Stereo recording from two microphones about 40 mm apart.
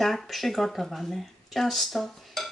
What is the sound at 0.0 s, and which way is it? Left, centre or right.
Speech, centre.